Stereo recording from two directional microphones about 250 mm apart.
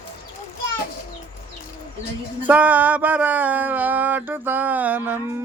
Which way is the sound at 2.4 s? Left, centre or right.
Centre.